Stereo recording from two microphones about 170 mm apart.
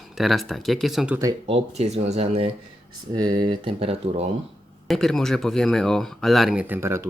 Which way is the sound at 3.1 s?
25° right (ahead or behind).